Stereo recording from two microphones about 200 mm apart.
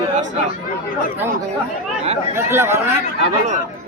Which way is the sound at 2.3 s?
10° right (ahead or behind).